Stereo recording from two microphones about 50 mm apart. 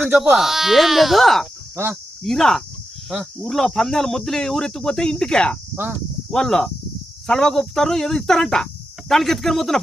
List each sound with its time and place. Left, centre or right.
0.3 s speech: centre
1.7 s speech: right
2.2 s speech: centre